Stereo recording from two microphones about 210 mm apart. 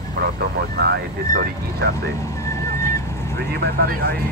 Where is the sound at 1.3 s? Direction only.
45° right (ahead or behind).